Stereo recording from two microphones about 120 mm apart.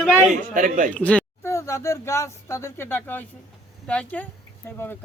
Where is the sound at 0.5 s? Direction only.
90° right.